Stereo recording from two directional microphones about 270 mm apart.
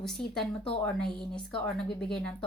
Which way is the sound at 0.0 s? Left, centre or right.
Centre.